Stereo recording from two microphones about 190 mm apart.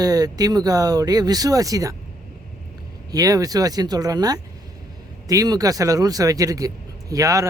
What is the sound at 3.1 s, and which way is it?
Speech, 20° right (ahead or behind).